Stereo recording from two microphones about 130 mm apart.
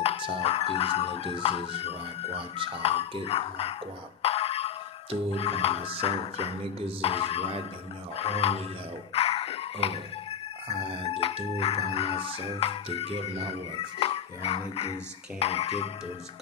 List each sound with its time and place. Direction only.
0.4 s speech: 50° left (ahead or behind)
4.2 s music: 50° left (ahead or behind)
5.3 s speech: 50° left (ahead or behind)
9.1 s a sound: 50° left (ahead or behind)
10.8 s speech: 45° right (ahead or behind)
11.1 s speech: 50° left (ahead or behind)
13.1 s speech: 50° right (ahead or behind)
13.7 s speech: 50° left (ahead or behind)